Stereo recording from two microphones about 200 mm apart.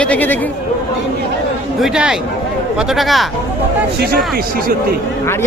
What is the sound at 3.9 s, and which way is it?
Speech, 50° right (ahead or behind).